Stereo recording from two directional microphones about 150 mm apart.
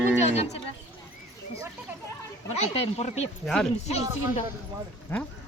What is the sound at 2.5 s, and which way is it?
Speech, 40° left (ahead or behind).